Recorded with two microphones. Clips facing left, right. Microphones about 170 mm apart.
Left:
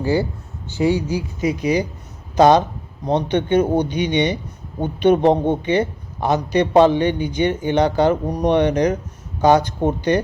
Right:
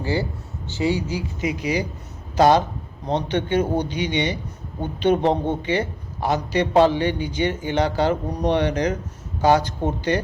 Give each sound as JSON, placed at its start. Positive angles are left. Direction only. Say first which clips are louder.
{"t": 0.0, "sound": "a man's voice", "louder": "left 5 dB", "side_deg": 15}